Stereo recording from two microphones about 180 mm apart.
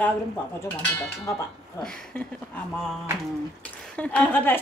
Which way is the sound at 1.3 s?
15° left (ahead or behind).